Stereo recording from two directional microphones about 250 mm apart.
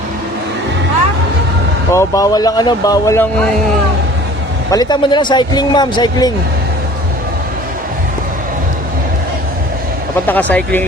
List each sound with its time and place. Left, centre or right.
1.9 s speech: centre
4.7 s speech: centre
10.2 s speech: centre